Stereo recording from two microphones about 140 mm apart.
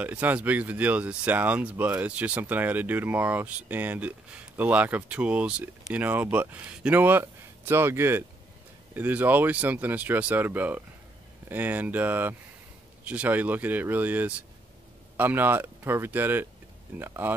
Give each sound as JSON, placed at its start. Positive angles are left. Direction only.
{"t": 0.0, "sound": "speech", "side_deg": -10}